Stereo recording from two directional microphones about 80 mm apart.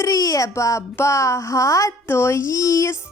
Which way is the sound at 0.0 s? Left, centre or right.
Left.